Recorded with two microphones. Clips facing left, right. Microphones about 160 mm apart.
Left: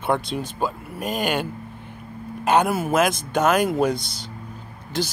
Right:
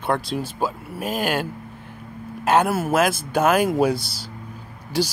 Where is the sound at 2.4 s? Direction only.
Centre (ahead or behind).